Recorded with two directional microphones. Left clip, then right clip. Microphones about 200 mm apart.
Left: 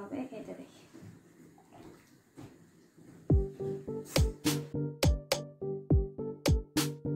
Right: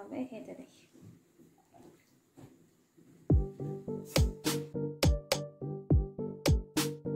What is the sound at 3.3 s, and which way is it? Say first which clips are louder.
Music: left 2 dB; centre (ahead or behind).